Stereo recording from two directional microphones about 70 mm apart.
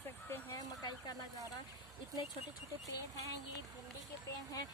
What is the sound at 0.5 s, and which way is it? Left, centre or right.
Dog, left.